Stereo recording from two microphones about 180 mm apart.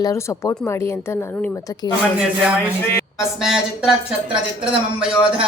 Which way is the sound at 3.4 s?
5° right (ahead or behind).